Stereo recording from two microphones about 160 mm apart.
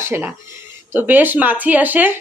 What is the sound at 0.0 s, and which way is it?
Speech, 15° right (ahead or behind).